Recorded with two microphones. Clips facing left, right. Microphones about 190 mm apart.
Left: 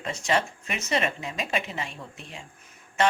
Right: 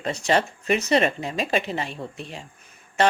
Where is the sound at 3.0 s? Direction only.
35° right (ahead or behind).